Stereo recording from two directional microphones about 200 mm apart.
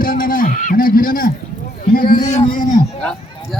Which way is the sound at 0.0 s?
45° left (ahead or behind).